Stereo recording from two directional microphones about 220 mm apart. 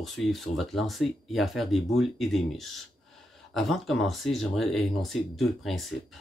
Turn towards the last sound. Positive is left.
turn(degrees=0)  # may be behind; listen again after turning